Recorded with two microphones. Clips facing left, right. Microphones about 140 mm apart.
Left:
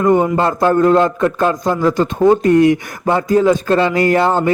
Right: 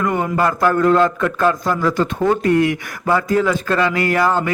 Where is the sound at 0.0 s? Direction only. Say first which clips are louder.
Left 5 dB; 25° left (ahead or behind).